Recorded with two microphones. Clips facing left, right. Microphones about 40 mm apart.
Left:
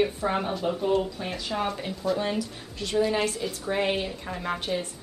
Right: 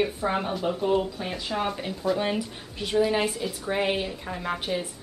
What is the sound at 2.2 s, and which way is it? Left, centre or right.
A woman's voice, centre.